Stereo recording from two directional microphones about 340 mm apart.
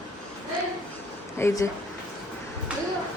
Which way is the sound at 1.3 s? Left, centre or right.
Centre.